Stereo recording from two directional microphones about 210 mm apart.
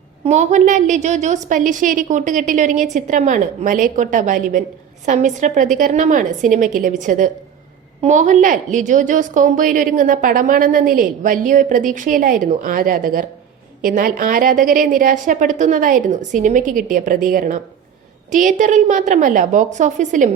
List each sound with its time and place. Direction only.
0.3 s a woman's voice: 35° right (ahead or behind)